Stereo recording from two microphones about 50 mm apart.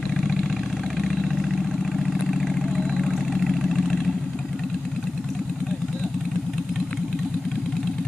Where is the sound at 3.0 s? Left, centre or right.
Centre.